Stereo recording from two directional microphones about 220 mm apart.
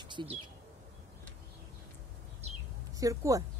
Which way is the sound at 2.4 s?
30° right (ahead or behind).